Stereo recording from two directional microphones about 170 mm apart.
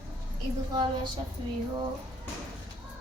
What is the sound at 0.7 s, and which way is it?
Speech, 25° right (ahead or behind).